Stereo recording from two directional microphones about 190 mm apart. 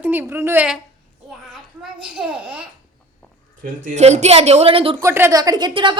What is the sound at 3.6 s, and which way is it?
Speech, 45° right (ahead or behind).